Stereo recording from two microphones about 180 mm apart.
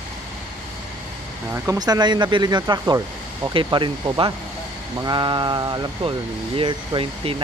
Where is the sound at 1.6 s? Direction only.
20° right (ahead or behind).